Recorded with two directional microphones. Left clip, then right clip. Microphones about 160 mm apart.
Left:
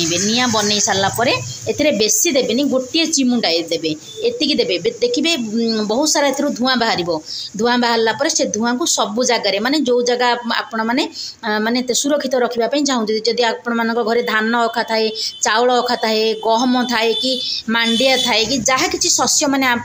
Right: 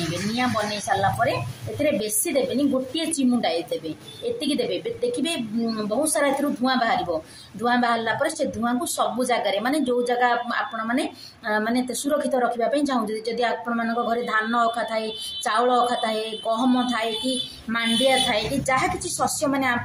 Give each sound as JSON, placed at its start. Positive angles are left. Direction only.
{"t": 1.0, "sound": "a woman's voice", "side_deg": 60}